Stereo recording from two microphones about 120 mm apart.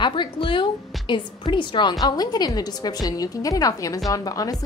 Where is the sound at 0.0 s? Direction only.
40° left (ahead or behind).